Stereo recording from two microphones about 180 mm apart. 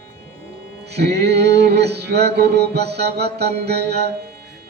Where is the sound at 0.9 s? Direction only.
65° right (ahead or behind).